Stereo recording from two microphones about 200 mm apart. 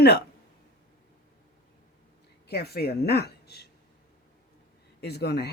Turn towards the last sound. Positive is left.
turn(degrees=55)  # may be behind; listen again after turning